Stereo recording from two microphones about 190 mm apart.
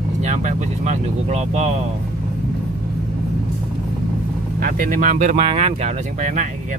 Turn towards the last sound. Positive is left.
turn(degrees=-40)  # may be behind; listen again after turning